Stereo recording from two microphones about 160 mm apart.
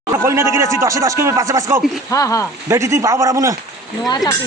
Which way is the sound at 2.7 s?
20° right (ahead or behind).